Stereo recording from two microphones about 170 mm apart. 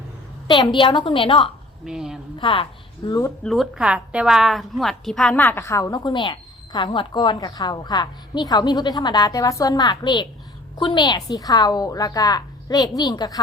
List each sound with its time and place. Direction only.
0.4 s a woman's voice: 25° left (ahead or behind)
1.8 s a woman's voice: 5° right (ahead or behind)
2.4 s a woman's voice: 30° left (ahead or behind)
3.1 s speech: 20° left (ahead or behind)
3.4 s a woman's voice: centre (ahead or behind); by 13.4 s 25° left (ahead or behind)